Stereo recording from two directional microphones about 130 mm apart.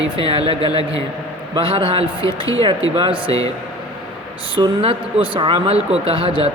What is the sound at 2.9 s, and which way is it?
Speech, 40° right (ahead or behind).